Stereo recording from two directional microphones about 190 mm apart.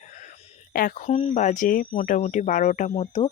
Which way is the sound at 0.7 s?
45° left (ahead or behind).